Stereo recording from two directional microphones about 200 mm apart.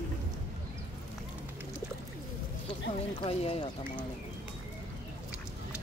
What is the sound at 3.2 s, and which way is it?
Speech, 30° left (ahead or behind).